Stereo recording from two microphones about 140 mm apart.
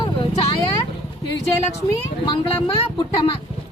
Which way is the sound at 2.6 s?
35° left (ahead or behind).